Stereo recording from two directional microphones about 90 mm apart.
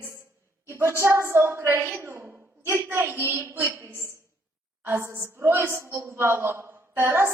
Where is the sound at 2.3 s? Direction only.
20° right (ahead or behind).